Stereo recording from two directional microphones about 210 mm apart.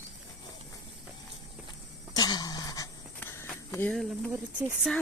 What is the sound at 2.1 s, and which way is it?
Pant, 20° left (ahead or behind).